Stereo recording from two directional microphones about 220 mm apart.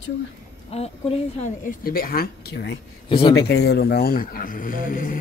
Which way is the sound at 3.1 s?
25° left (ahead or behind).